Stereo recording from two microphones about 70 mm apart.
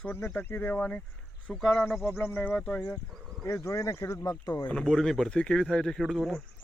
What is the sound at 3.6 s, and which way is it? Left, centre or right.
Speech, left.